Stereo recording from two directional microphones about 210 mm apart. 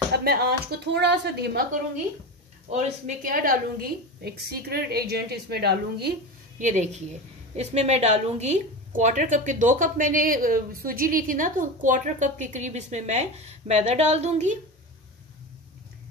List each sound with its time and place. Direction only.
0.1 s a woman's voice: 50° right (ahead or behind)
2.7 s a woman's voice: 35° right (ahead or behind)
6.6 s a woman's voice: 35° right (ahead or behind)